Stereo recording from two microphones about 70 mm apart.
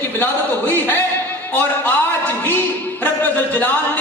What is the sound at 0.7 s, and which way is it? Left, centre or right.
Speech, left.